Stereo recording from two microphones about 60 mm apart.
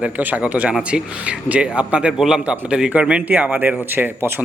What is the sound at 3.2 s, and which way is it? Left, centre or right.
Speech, right.